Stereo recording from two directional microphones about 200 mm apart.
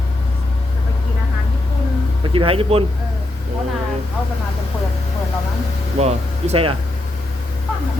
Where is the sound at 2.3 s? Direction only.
25° right (ahead or behind).